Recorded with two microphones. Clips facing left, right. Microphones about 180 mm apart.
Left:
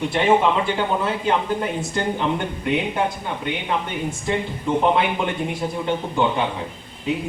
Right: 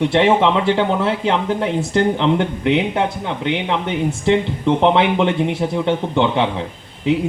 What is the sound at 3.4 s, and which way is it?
Speech, 85° right.